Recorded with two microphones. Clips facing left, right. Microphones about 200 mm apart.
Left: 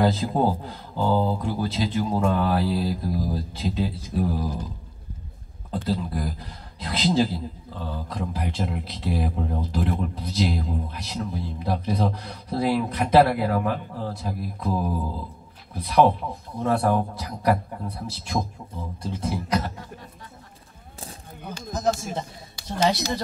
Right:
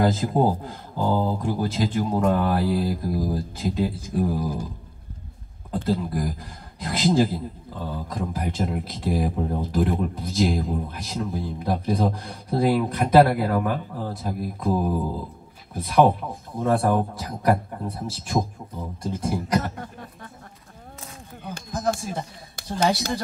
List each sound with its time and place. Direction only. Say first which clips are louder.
0.0 s speech: right 1 dB; 45° right (ahead or behind)
5.7 s speech: right 2 dB; 50° right (ahead or behind)
15.7 s speech: right 1 dB; 50° right (ahead or behind)
21.5 s a sound: left 1 dB; 55° right (ahead or behind)
22.6 s speech: even; 50° right (ahead or behind)